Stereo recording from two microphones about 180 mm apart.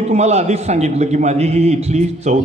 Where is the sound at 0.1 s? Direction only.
35° right (ahead or behind).